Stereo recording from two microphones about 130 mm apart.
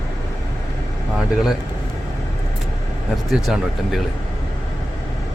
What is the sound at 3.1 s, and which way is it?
Speech, centre (ahead or behind).